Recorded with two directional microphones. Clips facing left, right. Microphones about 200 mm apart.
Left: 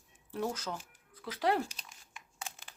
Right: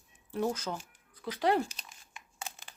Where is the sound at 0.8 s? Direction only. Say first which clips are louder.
Right 4 dB; centre (ahead or behind).